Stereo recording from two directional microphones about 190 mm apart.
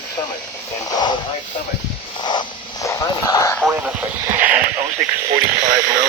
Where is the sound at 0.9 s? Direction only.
25° left (ahead or behind).